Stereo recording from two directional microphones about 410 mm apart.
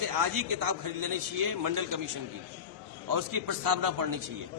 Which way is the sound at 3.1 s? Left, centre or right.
Right.